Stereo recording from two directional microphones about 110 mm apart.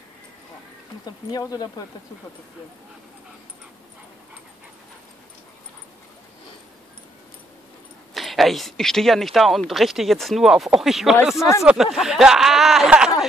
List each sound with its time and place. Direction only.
1.0 s speech: 35° left (ahead or behind)
8.1 s speech: centre (ahead or behind)